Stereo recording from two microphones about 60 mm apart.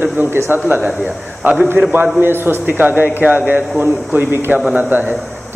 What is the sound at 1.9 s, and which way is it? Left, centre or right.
A man's voice, right.